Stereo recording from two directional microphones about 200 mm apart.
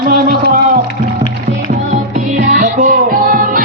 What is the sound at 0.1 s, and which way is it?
Music, 50° right (ahead or behind).